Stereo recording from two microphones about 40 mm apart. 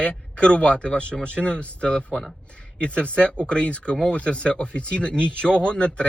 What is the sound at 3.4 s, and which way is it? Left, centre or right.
Speech, left.